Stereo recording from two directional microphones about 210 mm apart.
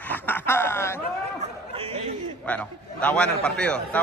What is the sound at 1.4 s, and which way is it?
Chatter, 30° right (ahead or behind).